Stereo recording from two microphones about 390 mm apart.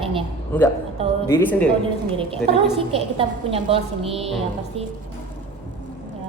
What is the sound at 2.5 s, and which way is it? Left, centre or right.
A woman's voice, centre.